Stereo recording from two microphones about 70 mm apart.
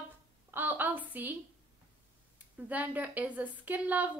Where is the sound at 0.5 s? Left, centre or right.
Right.